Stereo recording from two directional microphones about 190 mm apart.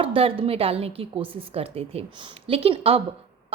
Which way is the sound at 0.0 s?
30° right (ahead or behind).